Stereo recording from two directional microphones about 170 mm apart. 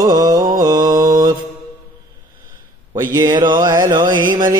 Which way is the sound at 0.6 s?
20° right (ahead or behind).